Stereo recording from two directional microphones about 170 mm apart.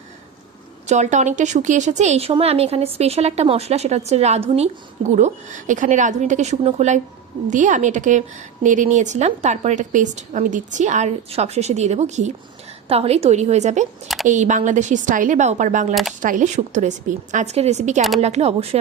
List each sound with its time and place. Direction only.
0.9 s a woman's voice: 45° right (ahead or behind)